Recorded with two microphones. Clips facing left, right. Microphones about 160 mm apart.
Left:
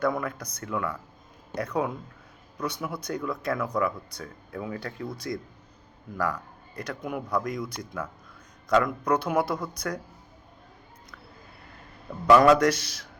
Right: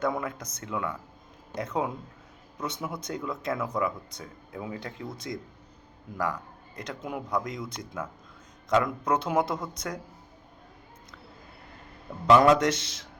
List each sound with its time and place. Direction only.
0.0 s speech: 20° right (ahead or behind)
12.3 s speech: 20° right (ahead or behind)